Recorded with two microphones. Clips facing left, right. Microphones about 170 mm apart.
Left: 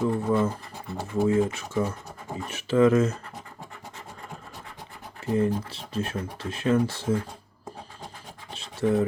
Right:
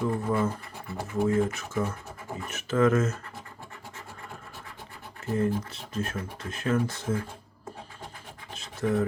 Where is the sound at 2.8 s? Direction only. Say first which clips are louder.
Left 4 dB; 15° left (ahead or behind).